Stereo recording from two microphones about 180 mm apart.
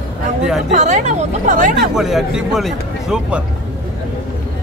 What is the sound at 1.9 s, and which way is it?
Speech, 5° right (ahead or behind).